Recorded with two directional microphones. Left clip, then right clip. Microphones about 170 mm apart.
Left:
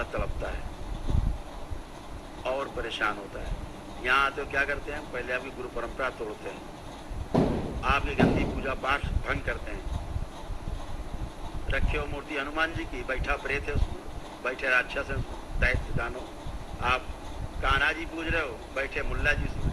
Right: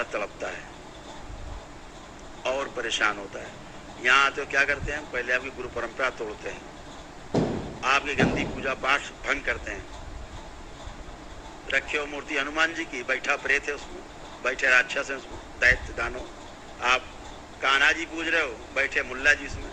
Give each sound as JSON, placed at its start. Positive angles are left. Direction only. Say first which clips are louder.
{"t": 0.0, "sound": "vehicle", "louder": "right 3 dB", "side_deg": -15}
{"t": 2.4, "sound": "a sound", "louder": "right 3 dB", "side_deg": -15}
{"t": 4.0, "sound": "speech", "louder": "right 4 dB", "side_deg": -15}
{"t": 7.8, "sound": "speech", "louder": "right 3 dB", "side_deg": -15}
{"t": 11.7, "sound": "speech", "louder": "right 5 dB", "side_deg": -15}
{"t": 17.6, "sound": "speech", "louder": "right 5 dB", "side_deg": -15}